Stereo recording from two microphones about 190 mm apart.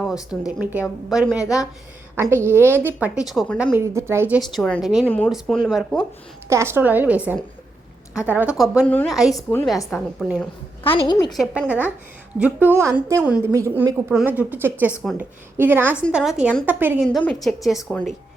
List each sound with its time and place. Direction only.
0.0 s speech: 5° right (ahead or behind)
1.4 s a woman's voice: 15° left (ahead or behind)
2.1 s a woman's voice: 15° right (ahead or behind)
3.8 s a woman's voice: 15° right (ahead or behind)
4.5 s speech: centre (ahead or behind)
6.5 s a woman's voice: 15° right (ahead or behind)
8.9 s a woman's voice: 10° left (ahead or behind)
10.8 s a woman's voice: 25° left (ahead or behind)
11.3 s a woman's voice: 5° right (ahead or behind)
17.1 s speech: centre (ahead or behind)